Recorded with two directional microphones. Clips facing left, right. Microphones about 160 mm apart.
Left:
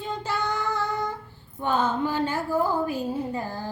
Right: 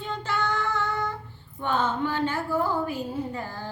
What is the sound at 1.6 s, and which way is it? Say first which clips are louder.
A woman's voice: left 2 dB; 10° left (ahead or behind).